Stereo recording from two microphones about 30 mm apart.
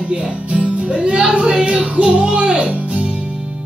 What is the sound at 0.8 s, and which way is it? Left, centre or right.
Music, right.